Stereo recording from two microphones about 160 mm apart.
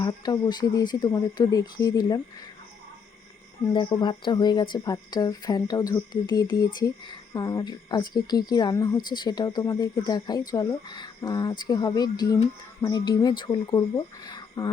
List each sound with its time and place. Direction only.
0.0 s a woman's voice: 25° left (ahead or behind)
3.7 s a woman's voice: 30° left (ahead or behind)